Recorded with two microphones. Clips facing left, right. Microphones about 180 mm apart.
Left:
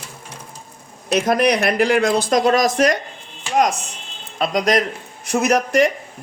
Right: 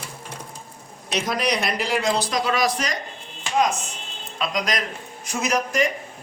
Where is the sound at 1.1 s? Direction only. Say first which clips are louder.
Left 7 dB; 55° left (ahead or behind).